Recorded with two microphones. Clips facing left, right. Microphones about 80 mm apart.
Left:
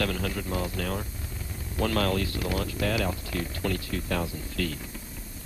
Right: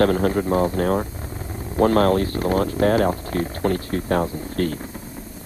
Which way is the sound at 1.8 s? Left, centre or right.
Right.